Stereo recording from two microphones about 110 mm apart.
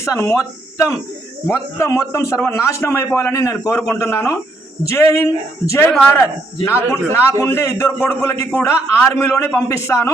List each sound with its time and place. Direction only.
0.0 s a man's voice: 25° left (ahead or behind)
6.9 s a man's voice: 25° left (ahead or behind)